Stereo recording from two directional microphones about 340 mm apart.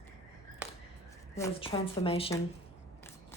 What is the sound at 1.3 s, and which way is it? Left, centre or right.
Speech, centre.